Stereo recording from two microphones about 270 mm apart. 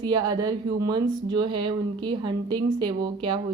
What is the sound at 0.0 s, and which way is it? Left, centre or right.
Speech, centre.